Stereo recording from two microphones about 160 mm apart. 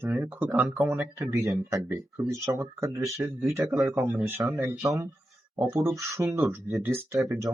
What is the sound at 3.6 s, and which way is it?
Speech, centre (ahead or behind).